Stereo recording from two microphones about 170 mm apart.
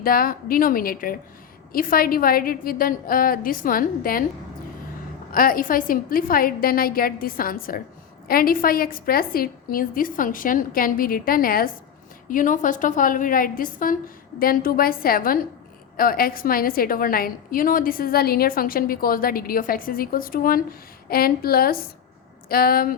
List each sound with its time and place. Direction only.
0.0 s a woman's voice: 60° left (ahead or behind)
5.3 s a woman's voice: 55° left (ahead or behind)